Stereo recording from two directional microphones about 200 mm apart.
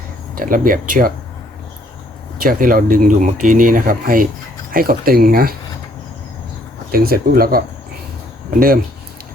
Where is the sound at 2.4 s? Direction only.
45° right (ahead or behind).